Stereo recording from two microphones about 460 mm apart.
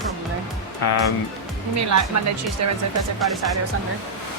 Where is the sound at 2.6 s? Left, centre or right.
Right.